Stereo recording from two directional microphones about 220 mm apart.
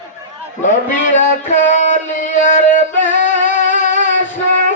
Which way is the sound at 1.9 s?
35° left (ahead or behind).